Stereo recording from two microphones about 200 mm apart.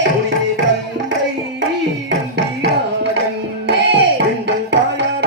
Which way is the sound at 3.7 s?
60° right (ahead or behind).